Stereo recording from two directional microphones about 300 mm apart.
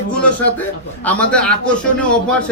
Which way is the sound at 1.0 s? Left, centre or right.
Centre.